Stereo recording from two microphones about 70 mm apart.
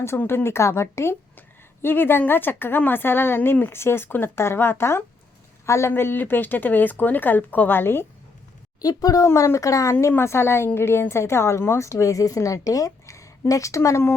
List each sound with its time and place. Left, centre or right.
0.2 s a woman's voice: left
5.9 s speech: left
8.8 s a woman's voice: left
9.2 s a woman's voice: left